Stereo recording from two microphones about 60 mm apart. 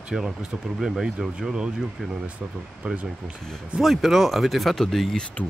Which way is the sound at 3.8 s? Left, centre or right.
Centre.